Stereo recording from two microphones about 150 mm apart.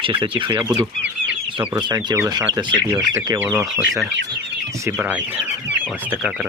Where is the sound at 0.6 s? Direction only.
10° right (ahead or behind).